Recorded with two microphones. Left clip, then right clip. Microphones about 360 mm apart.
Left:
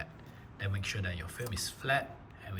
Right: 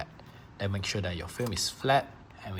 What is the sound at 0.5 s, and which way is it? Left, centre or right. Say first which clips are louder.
Speech: right 5 dB; centre.